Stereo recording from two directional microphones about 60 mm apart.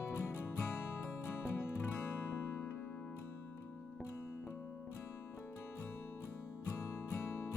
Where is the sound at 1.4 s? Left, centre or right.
Left.